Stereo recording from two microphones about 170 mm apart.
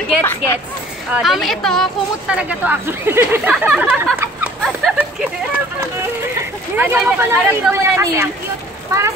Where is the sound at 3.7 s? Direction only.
5° right (ahead or behind).